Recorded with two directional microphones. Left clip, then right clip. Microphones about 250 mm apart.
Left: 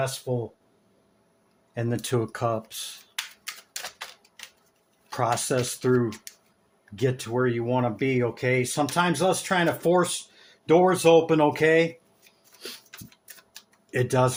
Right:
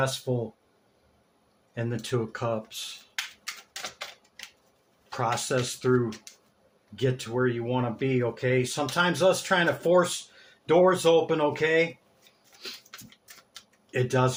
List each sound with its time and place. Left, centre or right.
0.3 s speech: centre
1.7 s speech: left
3.4 s typewriter: centre
5.0 s speech: left
13.9 s speech: left